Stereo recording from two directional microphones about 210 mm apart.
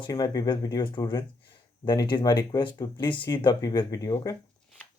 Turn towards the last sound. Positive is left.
turn(degrees=15)  # may be behind; listen again after turning